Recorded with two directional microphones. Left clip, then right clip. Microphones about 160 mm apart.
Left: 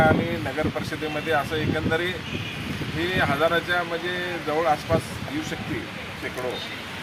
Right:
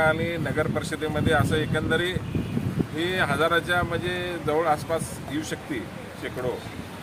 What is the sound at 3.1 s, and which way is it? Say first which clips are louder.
Speech: left 1 dB; 30° right (ahead or behind).